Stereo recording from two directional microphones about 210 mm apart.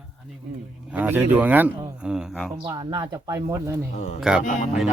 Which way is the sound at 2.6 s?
20° right (ahead or behind).